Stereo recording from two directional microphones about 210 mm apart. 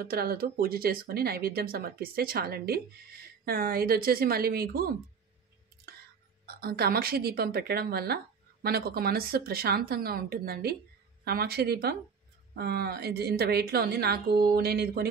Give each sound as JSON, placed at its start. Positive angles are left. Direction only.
{"t": 0.0, "sound": "speech", "side_deg": -45}
{"t": 6.4, "sound": "speech", "side_deg": -45}